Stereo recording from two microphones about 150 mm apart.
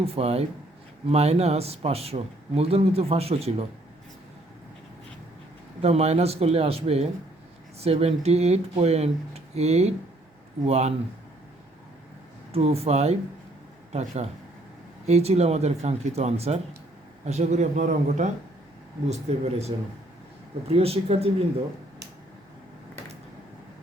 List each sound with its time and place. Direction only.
0.0 s speech: 40° right (ahead or behind)
5.8 s speech: 45° right (ahead or behind)
12.5 s speech: 40° right (ahead or behind)